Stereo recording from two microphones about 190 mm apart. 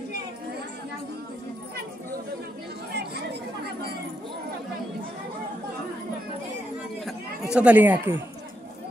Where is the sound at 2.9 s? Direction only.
60° right (ahead or behind).